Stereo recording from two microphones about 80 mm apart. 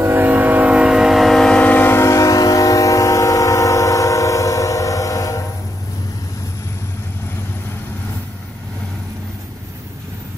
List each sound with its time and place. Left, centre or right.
0.0 s train: right; by 2.0 s left
2.0 s train: left